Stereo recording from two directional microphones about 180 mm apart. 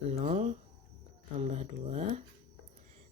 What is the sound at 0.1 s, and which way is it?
Speech, 35° right (ahead or behind).